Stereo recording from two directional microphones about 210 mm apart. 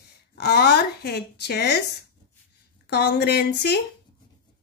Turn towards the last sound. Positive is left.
turn(degrees=50)  # may be behind; listen again after turning